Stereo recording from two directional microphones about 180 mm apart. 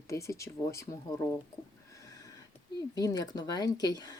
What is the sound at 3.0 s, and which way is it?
Speech, 20° left (ahead or behind).